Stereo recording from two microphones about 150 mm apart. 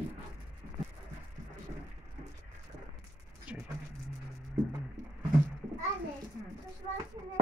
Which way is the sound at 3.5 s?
10° right (ahead or behind).